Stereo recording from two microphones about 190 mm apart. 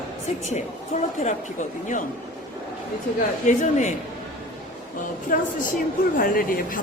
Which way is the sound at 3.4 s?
40° left (ahead or behind).